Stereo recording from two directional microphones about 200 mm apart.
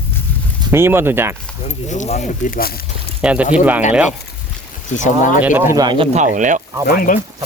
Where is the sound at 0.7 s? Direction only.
10° right (ahead or behind).